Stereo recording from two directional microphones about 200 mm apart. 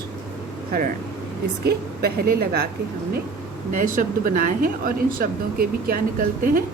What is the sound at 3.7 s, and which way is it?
Speech, 40° right (ahead or behind).